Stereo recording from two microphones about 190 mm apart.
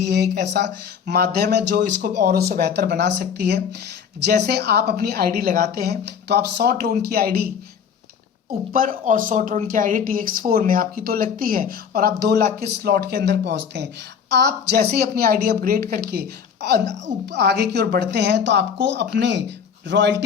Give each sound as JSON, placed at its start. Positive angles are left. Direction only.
{"t": 0.0, "sound": "a woman's voice", "side_deg": -60}
{"t": 8.7, "sound": "a woman's voice", "side_deg": -45}